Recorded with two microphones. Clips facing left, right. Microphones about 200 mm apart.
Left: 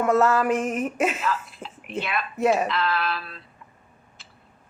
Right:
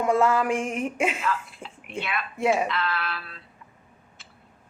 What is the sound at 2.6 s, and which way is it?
Speech, 40° left (ahead or behind).